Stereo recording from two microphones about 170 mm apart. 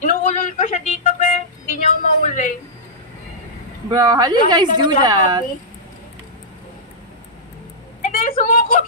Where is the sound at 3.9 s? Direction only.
25° right (ahead or behind).